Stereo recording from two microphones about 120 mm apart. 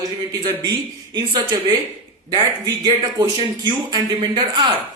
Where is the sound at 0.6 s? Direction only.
35° right (ahead or behind).